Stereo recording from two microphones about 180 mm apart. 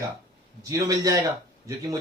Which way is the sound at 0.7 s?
20° right (ahead or behind).